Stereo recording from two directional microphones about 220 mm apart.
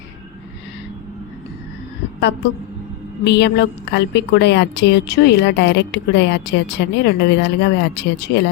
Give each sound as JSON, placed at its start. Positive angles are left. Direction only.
{"t": 3.2, "sound": "a woman's voice", "side_deg": 50}